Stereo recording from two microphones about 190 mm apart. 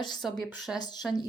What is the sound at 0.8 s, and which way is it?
Speech, 20° left (ahead or behind).